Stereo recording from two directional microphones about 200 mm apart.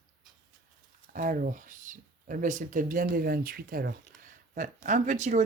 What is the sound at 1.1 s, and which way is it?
Speech, 40° right (ahead or behind).